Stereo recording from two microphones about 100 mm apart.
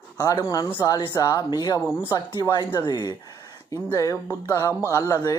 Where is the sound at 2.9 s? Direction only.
40° left (ahead or behind).